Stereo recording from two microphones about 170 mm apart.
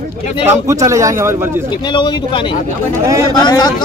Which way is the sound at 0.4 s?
15° right (ahead or behind).